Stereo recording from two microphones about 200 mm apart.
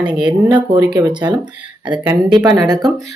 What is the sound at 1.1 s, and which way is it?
Speech, 20° right (ahead or behind).